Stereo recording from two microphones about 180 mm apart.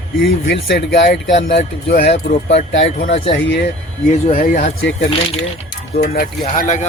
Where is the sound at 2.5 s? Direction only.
80° left.